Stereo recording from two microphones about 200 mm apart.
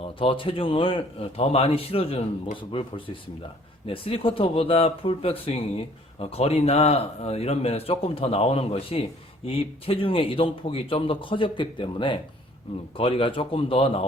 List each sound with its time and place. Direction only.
0.2 s speech: 25° left (ahead or behind)